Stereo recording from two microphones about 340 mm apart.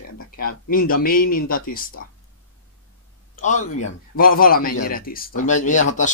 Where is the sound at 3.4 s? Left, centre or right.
Left.